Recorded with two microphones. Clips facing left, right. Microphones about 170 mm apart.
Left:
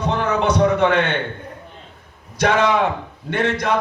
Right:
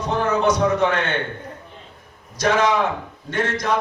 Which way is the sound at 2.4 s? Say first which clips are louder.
Left 2 dB; 60° left (ahead or behind).